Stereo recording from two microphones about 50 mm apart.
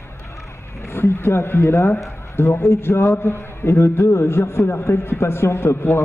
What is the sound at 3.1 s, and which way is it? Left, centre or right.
A man's voice, left.